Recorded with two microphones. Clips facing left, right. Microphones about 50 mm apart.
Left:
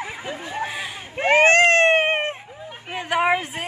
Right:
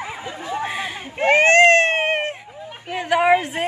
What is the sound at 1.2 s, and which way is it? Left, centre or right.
Baby cry, centre.